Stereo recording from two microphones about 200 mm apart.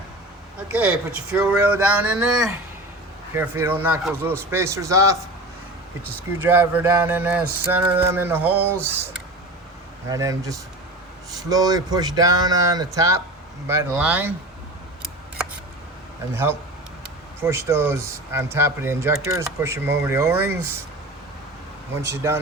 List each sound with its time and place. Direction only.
0.7 s mantra: 5° right (ahead or behind)
6.4 s mantra: 10° right (ahead or behind)
10.1 s mantra: 15° right (ahead or behind)
11.4 s speech: 20° right (ahead or behind)
13.7 s mantra: 10° right (ahead or behind)
16.3 s mantra: 10° right (ahead or behind)
22.1 s mantra: 15° right (ahead or behind)